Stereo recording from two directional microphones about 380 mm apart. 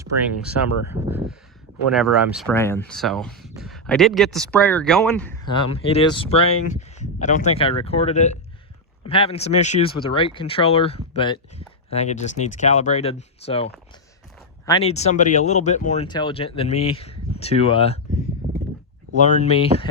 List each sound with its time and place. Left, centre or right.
1.1 s speech: centre
14.7 s speech: centre
19.1 s speech: centre